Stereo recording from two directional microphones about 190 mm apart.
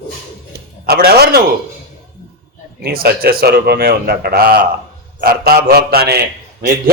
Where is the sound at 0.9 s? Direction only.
55° right (ahead or behind).